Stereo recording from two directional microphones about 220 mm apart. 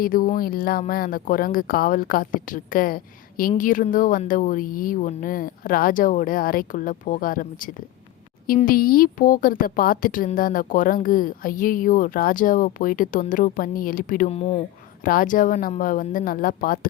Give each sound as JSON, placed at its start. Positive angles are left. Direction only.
{"t": 0.0, "sound": "a woman's voice", "side_deg": 40}
{"t": 15.0, "sound": "a woman's voice", "side_deg": 40}